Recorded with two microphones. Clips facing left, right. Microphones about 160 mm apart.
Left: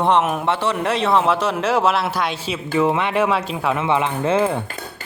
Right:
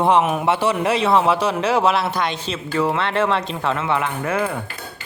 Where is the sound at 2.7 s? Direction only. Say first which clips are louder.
Left 2 dB; 20° left (ahead or behind).